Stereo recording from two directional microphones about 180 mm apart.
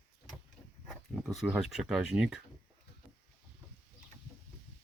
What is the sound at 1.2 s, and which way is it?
Speech, 5° right (ahead or behind).